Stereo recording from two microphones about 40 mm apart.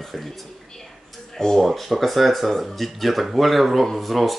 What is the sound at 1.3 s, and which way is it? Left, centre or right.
Speech, centre.